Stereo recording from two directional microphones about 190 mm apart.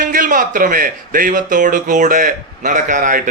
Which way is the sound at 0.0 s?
45° right (ahead or behind).